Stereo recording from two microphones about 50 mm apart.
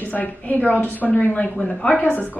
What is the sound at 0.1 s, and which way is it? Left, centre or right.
A woman's voice, left.